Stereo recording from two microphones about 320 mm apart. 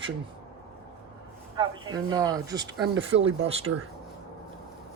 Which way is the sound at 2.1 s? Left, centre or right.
Centre.